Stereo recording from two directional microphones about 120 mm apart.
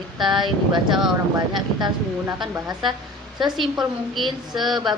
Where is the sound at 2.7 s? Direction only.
40° right (ahead or behind).